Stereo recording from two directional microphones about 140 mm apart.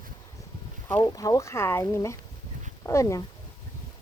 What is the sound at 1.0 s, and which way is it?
Speech, 25° left (ahead or behind).